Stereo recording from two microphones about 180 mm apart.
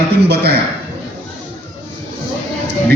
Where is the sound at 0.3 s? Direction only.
65° right (ahead or behind).